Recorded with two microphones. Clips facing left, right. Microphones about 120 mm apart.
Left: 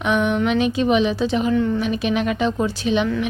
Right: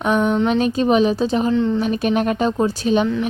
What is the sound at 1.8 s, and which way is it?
A woman's voice, 40° right (ahead or behind).